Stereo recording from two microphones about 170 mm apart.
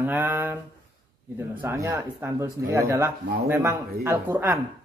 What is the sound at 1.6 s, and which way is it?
Speech, 15° right (ahead or behind).